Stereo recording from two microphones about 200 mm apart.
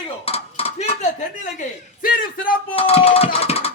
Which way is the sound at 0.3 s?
30° left (ahead or behind).